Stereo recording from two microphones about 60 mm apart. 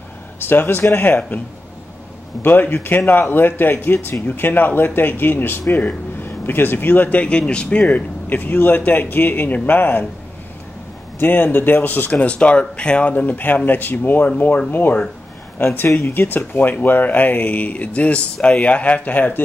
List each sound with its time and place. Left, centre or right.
0.4 s speech: left
2.4 s speech: left
11.1 s speech: left